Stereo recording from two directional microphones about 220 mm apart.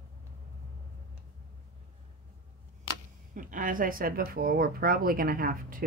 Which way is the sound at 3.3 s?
40° right (ahead or behind).